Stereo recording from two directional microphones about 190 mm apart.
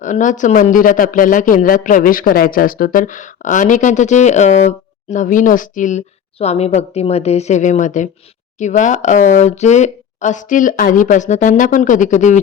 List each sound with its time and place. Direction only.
0.0 s speech: 40° left (ahead or behind)